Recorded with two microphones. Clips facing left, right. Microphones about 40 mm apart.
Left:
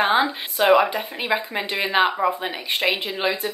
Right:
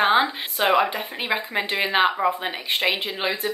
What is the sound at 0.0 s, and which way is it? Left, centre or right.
Speech, centre.